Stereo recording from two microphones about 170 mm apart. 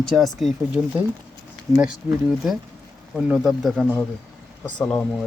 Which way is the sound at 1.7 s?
20° right (ahead or behind).